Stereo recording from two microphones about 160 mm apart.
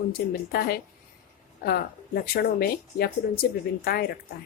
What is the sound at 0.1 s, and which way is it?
Speech, 70° left (ahead or behind).